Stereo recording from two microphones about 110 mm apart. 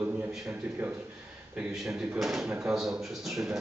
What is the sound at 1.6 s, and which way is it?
A man's voice, 5° right (ahead or behind).